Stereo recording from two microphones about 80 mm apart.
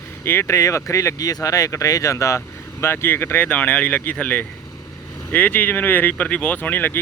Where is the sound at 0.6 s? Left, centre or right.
Left.